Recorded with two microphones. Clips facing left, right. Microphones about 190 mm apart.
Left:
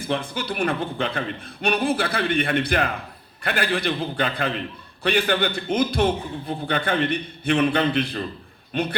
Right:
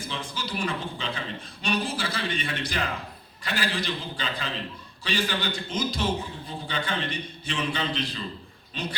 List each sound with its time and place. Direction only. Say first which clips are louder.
0.1 s a man's voice: left 9 dB; 60° left (ahead or behind)